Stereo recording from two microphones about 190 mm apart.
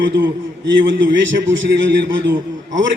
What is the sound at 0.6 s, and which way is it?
A man's voice, 75° right (ahead or behind).